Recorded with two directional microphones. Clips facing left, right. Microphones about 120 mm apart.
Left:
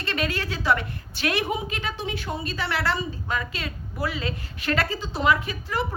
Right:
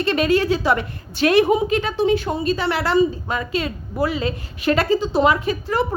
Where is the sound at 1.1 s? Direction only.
30° right (ahead or behind).